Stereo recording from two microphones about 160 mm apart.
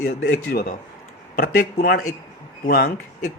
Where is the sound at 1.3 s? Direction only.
70° left (ahead or behind).